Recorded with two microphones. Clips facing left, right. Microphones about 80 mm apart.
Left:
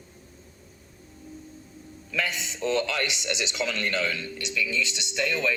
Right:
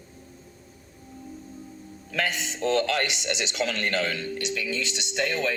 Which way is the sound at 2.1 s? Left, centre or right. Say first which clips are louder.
Right 2 dB; right.